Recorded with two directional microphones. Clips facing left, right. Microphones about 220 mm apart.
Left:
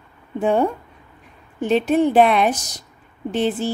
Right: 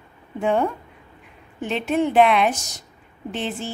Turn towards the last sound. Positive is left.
turn(degrees=40)  # may be behind; listen again after turning